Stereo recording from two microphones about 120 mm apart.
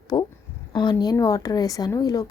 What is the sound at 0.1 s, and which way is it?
Speech, 40° left (ahead or behind).